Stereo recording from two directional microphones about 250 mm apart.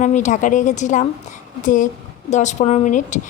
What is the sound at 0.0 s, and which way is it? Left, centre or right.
A woman's voice, left.